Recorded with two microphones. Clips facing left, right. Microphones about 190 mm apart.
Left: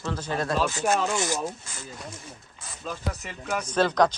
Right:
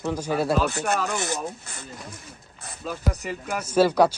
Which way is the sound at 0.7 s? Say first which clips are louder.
Left 1 dB; 60° right (ahead or behind).